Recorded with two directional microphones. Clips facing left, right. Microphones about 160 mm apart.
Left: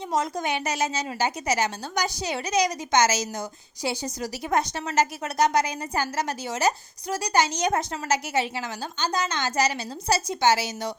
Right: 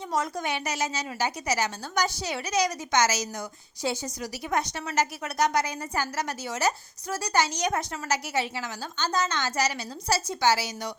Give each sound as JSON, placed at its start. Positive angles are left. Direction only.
{"t": 0.4, "sound": "a woman's voice", "side_deg": 20}
{"t": 4.2, "sound": "a woman's voice", "side_deg": 35}